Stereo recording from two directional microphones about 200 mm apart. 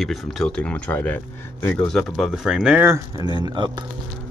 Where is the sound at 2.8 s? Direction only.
15° right (ahead or behind).